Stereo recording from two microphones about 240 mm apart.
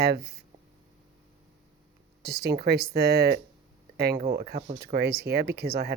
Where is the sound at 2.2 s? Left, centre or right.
Right.